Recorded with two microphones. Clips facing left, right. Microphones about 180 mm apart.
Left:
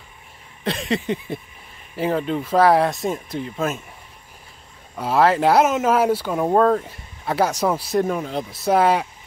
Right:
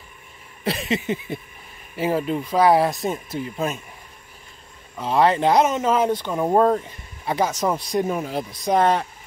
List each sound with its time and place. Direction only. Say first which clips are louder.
0.7 s speech: left 1 dB; 5° right (ahead or behind)
4.9 s speech: left 1 dB; 5° left (ahead or behind)
6.5 s speech: left 1 dB; 5° right (ahead or behind)
8.1 s speech: left 1 dB; 5° right (ahead or behind)
8.5 s speech: left 2 dB; 5° left (ahead or behind)